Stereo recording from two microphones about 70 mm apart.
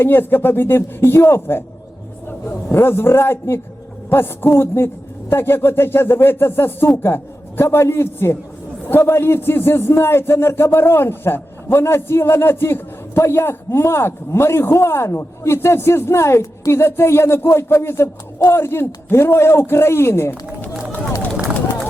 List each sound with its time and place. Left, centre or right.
0.0 s a man's voice: left